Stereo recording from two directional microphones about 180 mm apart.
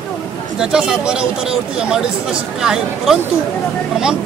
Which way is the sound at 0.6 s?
5° right (ahead or behind).